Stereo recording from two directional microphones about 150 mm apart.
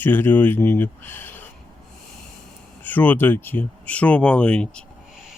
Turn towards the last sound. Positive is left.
turn(degrees=5)  # may be behind; listen again after turning